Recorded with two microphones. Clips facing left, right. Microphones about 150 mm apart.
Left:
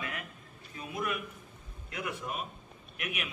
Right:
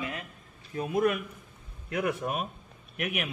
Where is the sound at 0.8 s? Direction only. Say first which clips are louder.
Right 9 dB; 50° right (ahead or behind).